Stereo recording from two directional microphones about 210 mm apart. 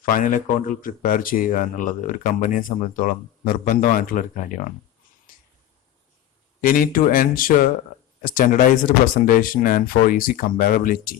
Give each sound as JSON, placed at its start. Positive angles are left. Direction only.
{"t": 0.0, "sound": "speech", "side_deg": 40}
{"t": 5.3, "sound": "finger snapping", "side_deg": 40}
{"t": 6.6, "sound": "speech", "side_deg": 40}